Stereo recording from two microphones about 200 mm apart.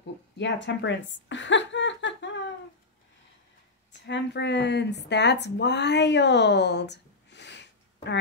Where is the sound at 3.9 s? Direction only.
60° left (ahead or behind).